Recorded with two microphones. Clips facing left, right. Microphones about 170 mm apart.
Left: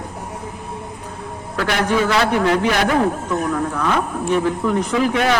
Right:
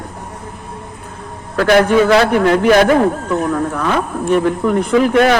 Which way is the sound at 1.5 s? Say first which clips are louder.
Right 8 dB; 50° right (ahead or behind).